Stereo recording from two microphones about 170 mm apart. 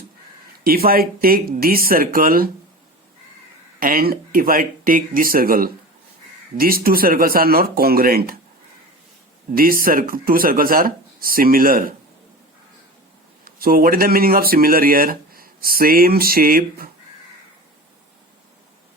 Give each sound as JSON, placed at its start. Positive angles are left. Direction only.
{"t": 0.6, "sound": "speech", "side_deg": -60}
{"t": 3.8, "sound": "speech", "side_deg": -55}
{"t": 9.6, "sound": "speech", "side_deg": -60}
{"t": 13.4, "sound": "speech", "side_deg": -60}